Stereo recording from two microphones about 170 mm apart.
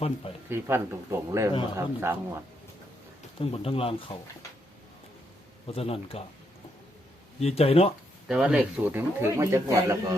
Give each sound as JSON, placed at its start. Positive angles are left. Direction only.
{"t": 0.5, "sound": "speech", "side_deg": -15}
{"t": 3.4, "sound": "speech", "side_deg": 35}
{"t": 5.6, "sound": "speech", "side_deg": 35}
{"t": 7.3, "sound": "speech", "side_deg": 35}
{"t": 8.3, "sound": "speech", "side_deg": -5}